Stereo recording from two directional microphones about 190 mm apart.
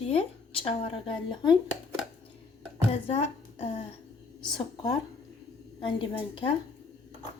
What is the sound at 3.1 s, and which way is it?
Speech, 35° left (ahead or behind).